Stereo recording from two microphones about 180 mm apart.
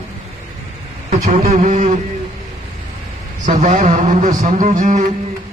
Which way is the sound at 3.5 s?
35° right (ahead or behind).